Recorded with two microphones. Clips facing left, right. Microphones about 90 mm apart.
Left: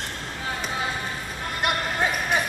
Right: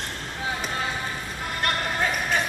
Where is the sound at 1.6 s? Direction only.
15° left (ahead or behind).